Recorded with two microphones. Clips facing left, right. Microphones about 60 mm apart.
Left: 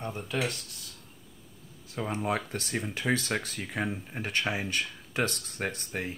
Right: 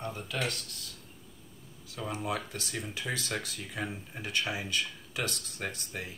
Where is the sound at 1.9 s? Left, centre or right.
Left.